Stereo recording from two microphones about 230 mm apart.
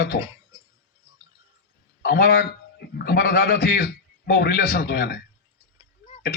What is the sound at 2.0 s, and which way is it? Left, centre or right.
A man's voice, left.